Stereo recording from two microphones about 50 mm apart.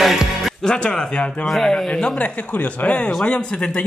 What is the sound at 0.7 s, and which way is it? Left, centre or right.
Speech, centre.